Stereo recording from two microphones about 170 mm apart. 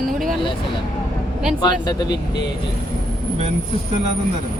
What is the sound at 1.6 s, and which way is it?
Speech, 25° left (ahead or behind).